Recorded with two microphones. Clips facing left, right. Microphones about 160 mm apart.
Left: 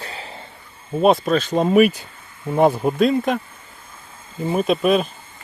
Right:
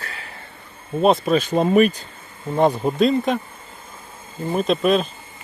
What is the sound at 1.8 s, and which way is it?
Speech, 10° left (ahead or behind).